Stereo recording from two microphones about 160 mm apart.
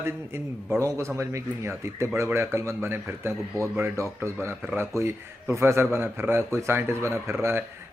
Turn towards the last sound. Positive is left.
turn(degrees=-15)  # may be behind; listen again after turning